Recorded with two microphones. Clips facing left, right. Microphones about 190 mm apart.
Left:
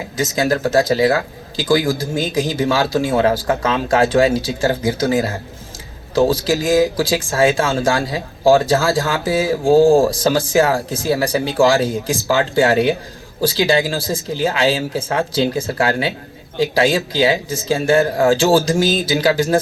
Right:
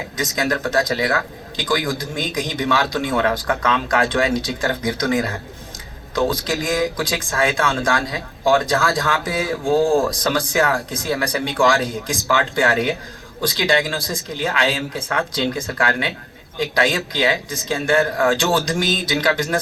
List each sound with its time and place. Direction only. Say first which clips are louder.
0.3 s speech: left 5 dB; 30° left (ahead or behind)